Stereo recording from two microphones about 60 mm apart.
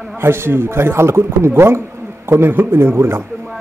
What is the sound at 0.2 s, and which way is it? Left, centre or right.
A man's voice, right.